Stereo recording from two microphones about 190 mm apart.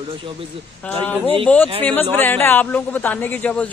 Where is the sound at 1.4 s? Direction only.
10° left (ahead or behind).